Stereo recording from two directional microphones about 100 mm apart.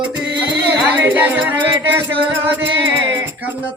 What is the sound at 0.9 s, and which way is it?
Music, 20° right (ahead or behind).